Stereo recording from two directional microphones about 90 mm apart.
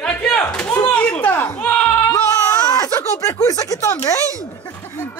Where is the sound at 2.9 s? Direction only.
40° left (ahead or behind).